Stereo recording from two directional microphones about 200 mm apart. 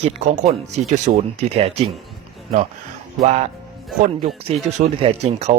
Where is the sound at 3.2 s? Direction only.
30° right (ahead or behind).